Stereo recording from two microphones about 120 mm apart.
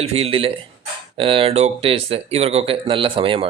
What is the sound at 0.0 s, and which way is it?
Speech, 55° right (ahead or behind).